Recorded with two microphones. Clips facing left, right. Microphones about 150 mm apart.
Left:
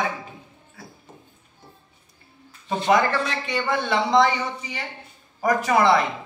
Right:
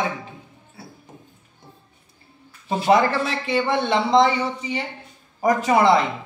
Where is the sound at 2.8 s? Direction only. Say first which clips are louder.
Right 2 dB; 30° right (ahead or behind).